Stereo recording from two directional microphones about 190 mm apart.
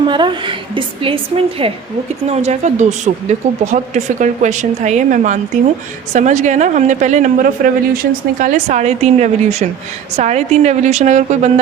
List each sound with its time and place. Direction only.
0.1 s a woman's voice: 25° right (ahead or behind)